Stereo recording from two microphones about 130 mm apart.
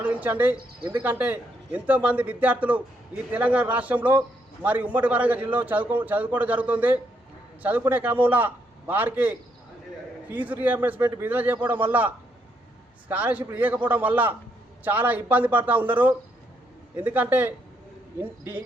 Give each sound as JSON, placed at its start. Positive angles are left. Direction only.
{"t": 0.0, "sound": "bird", "side_deg": -10}
{"t": 0.9, "sound": "a man's voice", "side_deg": -10}